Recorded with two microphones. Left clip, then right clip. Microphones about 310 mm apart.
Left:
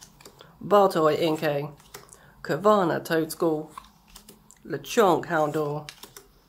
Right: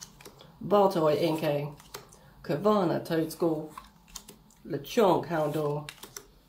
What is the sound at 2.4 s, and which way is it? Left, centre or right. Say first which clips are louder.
Speech: left 5 dB; left.